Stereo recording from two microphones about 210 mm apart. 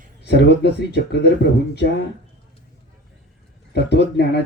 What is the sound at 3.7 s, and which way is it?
Speech, 50° left (ahead or behind).